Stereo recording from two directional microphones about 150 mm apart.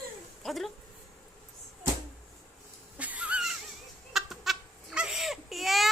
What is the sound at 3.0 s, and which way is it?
Dog, 10° right (ahead or behind).